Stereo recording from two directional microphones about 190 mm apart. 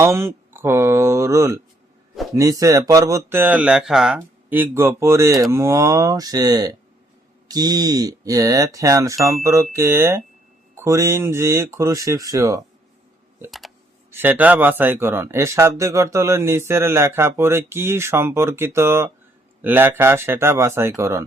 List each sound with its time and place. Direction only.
0.0 s speech: 15° right (ahead or behind)
14.1 s speech: 10° right (ahead or behind)